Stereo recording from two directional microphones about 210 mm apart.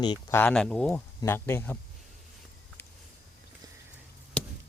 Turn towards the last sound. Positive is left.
turn(degrees=5)  # may be behind; listen again after turning